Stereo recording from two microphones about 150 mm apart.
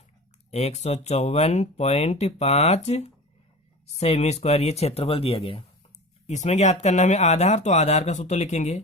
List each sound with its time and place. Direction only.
0.5 s speech: 45° left (ahead or behind)
6.2 s speech: 50° left (ahead or behind)